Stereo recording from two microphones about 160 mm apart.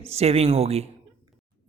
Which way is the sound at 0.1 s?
40° right (ahead or behind).